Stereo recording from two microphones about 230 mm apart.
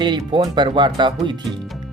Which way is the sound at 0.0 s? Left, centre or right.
Right.